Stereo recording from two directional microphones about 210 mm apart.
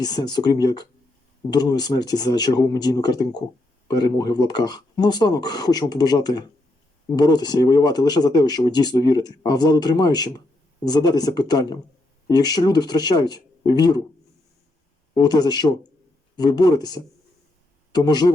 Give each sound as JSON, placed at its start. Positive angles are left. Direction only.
{"t": 0.0, "sound": "speech", "side_deg": 20}
{"t": 15.1, "sound": "speech", "side_deg": 20}